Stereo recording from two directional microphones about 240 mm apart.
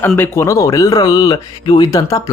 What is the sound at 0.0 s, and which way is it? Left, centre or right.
Speech, centre.